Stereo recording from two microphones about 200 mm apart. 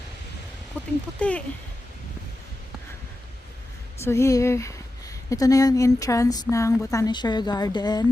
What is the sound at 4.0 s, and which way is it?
Speech, 15° left (ahead or behind).